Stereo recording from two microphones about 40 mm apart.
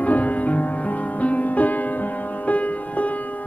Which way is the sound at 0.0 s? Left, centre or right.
Left.